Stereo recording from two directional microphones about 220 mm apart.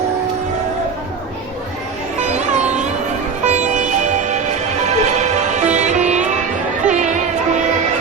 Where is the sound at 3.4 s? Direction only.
30° right (ahead or behind).